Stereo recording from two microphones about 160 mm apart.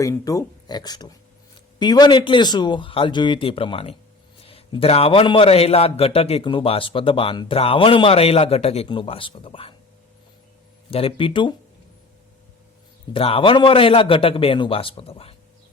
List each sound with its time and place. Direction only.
0.0 s a man's voice: 20° left (ahead or behind)
10.9 s a man's voice: 35° left (ahead or behind)
13.1 s a man's voice: 35° left (ahead or behind)